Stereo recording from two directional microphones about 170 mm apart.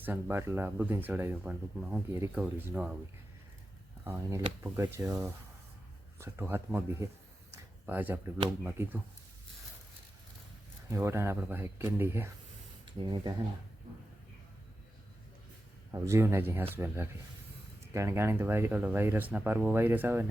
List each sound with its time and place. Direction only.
0.0 s speech: 10° right (ahead or behind)
4.6 s speech: 20° right (ahead or behind)
7.5 s a sound: 10° right (ahead or behind)
8.6 s speech: 10° right (ahead or behind)
10.8 s speech: 15° right (ahead or behind)
13.0 s speech: 30° right (ahead or behind)
15.9 s speech: 15° right (ahead or behind)